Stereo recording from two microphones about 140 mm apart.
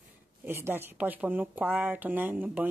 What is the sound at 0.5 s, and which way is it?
Speech, 15° right (ahead or behind).